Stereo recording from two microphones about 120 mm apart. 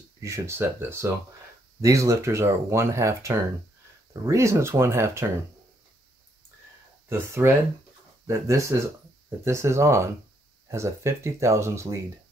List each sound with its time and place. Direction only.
0.2 s speech: 25° right (ahead or behind)
7.1 s speech: 20° right (ahead or behind)